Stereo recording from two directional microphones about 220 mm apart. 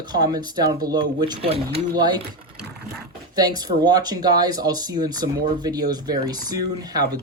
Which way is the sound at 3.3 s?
20° right (ahead or behind).